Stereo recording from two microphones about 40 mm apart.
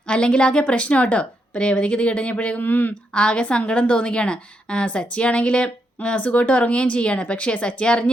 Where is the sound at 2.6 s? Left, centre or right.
Left.